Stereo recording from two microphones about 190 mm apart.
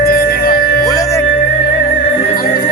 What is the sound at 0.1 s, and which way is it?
Music, 50° left (ahead or behind).